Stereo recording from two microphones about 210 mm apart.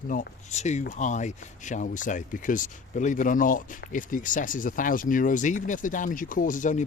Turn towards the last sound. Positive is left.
turn(degrees=40)  # may be behind; listen again after turning